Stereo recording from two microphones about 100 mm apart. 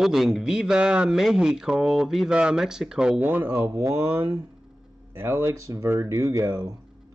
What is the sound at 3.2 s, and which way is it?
Speech, 20° right (ahead or behind).